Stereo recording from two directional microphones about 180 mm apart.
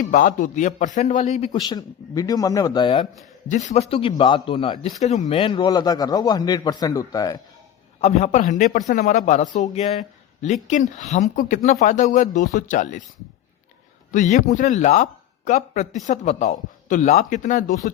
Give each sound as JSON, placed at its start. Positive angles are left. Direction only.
{"t": 0.0, "sound": "speech", "side_deg": 50}
{"t": 1.5, "sound": "a man's voice", "side_deg": 20}
{"t": 3.5, "sound": "a man's voice", "side_deg": 40}
{"t": 8.0, "sound": "speech", "side_deg": 40}
{"t": 14.1, "sound": "speech", "side_deg": 45}